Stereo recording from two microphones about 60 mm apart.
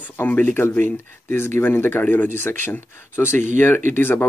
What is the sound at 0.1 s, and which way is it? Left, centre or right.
Speech, left.